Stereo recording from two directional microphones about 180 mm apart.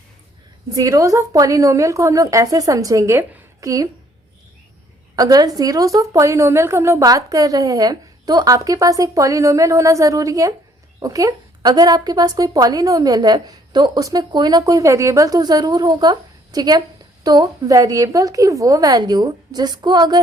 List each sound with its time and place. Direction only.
0.7 s a woman's voice: 20° right (ahead or behind)
5.1 s a woman's voice: 20° right (ahead or behind)